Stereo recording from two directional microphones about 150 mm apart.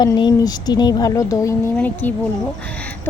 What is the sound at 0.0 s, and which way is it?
Speech, 30° left (ahead or behind).